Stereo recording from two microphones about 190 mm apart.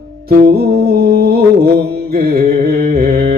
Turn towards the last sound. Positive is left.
turn(degrees=-55)  # may be behind; listen again after turning